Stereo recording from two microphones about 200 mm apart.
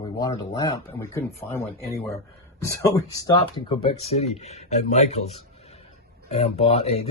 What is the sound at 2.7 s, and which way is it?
Speech, 20° left (ahead or behind).